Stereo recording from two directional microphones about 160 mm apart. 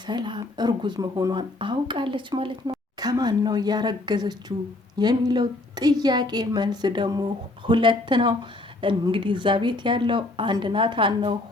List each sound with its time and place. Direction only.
0.0 s a woman's voice: 30° right (ahead or behind)